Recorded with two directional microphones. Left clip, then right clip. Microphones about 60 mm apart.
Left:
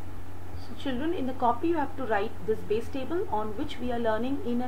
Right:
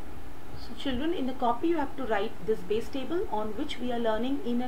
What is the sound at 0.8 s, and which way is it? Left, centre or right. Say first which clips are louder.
A woman's voice: even; centre.